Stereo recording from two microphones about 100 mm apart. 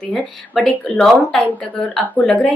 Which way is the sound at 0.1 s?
15° left (ahead or behind).